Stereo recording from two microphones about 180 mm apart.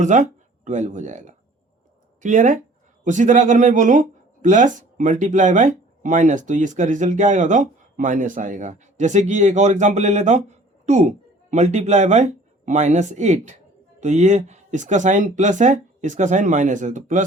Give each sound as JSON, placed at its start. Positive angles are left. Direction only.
{"t": 0.0, "sound": "speech", "side_deg": -40}